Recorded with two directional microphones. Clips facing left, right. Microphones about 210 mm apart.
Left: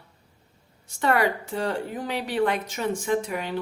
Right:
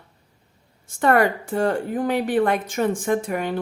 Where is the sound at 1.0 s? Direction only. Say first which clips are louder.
Right 5 dB; 50° right (ahead or behind).